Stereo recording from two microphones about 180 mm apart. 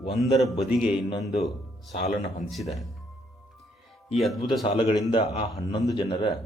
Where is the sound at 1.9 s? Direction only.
40° left (ahead or behind).